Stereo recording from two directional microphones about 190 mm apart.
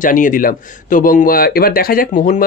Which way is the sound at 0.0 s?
45° left (ahead or behind).